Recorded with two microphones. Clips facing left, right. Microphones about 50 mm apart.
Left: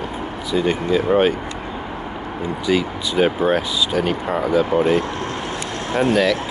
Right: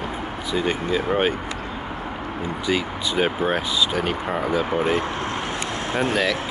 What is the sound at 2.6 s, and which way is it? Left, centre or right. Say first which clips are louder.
Speech: left 4 dB; centre.